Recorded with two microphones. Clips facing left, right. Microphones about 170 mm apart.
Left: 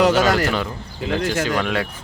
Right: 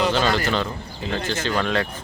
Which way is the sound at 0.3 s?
85° left.